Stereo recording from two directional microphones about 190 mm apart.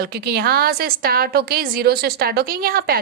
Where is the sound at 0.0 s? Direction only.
55° right (ahead or behind).